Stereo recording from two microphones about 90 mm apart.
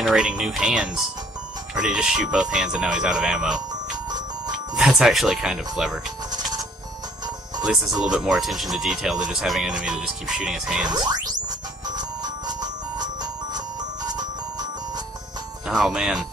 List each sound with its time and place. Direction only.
0.0 s speech: 10° right (ahead or behind)
4.7 s speech: 5° right (ahead or behind)
7.6 s speech: 5° right (ahead or behind)
10.9 s chirp tone: 50° right (ahead or behind)
15.7 s speech: 5° right (ahead or behind)